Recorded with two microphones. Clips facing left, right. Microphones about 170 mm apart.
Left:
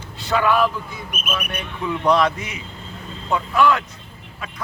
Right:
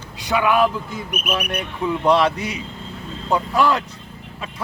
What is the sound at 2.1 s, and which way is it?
Speech, 30° right (ahead or behind).